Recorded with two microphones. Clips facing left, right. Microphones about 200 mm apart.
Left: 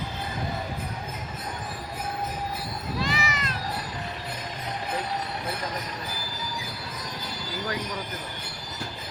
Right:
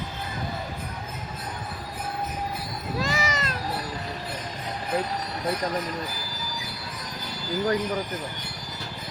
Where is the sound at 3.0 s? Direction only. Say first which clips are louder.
Right 3 dB; 45° right (ahead or behind).